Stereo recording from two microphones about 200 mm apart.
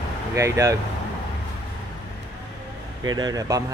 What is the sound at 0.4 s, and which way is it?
Speech, 15° right (ahead or behind).